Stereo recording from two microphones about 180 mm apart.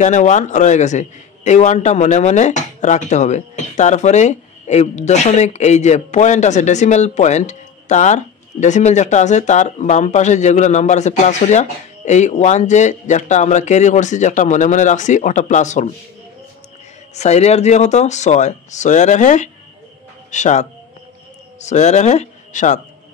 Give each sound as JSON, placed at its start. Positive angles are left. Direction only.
{"t": 0.0, "sound": "a man's voice", "side_deg": 40}
{"t": 17.1, "sound": "a man's voice", "side_deg": 40}